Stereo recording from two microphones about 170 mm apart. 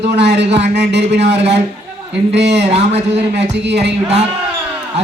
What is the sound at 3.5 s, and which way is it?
Speech, 90° right.